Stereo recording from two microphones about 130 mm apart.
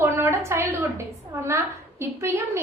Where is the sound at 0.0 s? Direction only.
20° right (ahead or behind).